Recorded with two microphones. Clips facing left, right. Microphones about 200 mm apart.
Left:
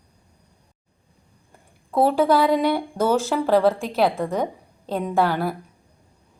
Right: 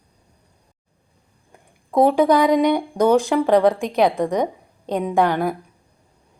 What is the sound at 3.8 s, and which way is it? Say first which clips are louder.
Speech: right 3 dB; 5° left (ahead or behind).